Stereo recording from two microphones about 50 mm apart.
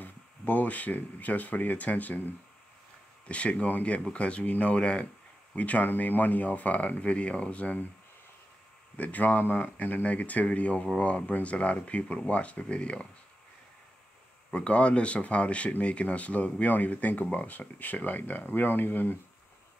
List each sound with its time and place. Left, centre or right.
0.0 s speech: left
3.3 s speech: left
5.6 s speech: left
8.9 s speech: left
14.5 s speech: left